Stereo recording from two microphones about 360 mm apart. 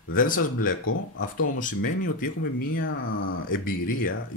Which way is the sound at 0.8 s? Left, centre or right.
Left.